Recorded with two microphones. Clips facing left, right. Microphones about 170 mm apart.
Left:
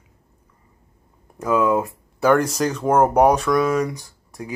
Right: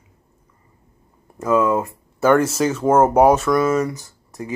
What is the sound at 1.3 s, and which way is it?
Speech, centre (ahead or behind).